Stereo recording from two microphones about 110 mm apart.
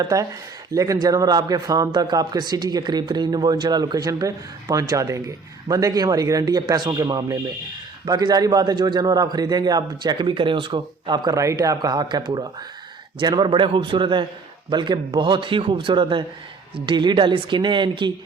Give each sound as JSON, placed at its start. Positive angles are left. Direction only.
{"t": 0.0, "sound": "a man's voice", "side_deg": -30}